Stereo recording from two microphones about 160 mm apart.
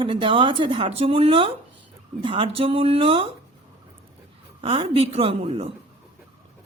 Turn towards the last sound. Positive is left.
turn(degrees=-35)  # may be behind; listen again after turning